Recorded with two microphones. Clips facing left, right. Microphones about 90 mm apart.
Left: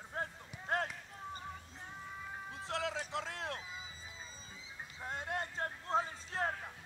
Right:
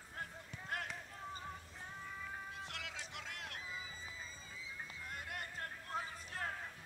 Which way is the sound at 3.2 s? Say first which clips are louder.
Left 6 dB; 30° left (ahead or behind).